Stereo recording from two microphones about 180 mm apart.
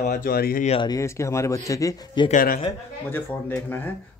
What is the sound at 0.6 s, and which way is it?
Speech, 30° left (ahead or behind).